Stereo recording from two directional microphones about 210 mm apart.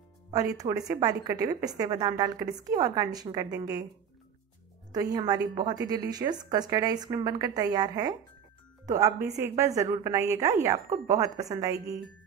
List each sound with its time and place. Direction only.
0.3 s a woman's voice: 15° right (ahead or behind)
4.9 s a woman's voice: 20° right (ahead or behind)